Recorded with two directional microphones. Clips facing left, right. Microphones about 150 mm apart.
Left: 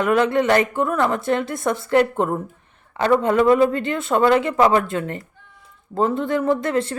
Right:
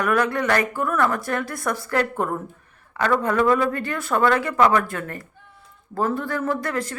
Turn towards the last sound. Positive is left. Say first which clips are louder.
# left 5 dB
turn(degrees=25)  # may be behind; listen again after turning